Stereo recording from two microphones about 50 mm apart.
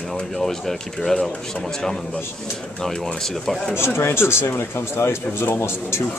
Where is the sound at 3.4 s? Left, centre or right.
Centre.